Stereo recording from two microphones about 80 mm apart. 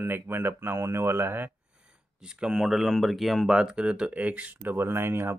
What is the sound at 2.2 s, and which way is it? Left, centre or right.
Speech, centre.